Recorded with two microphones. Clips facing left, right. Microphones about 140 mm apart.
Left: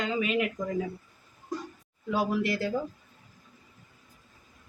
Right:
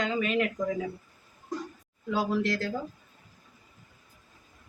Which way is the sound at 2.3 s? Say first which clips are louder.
Even; 10° left (ahead or behind).